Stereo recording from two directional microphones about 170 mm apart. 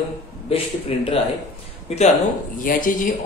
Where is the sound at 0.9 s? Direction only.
35° left (ahead or behind).